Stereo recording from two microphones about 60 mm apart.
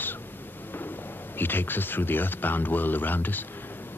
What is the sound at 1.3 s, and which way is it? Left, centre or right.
Speech, left.